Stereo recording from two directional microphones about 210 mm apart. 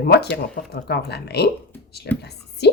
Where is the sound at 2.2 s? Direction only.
50° left (ahead or behind).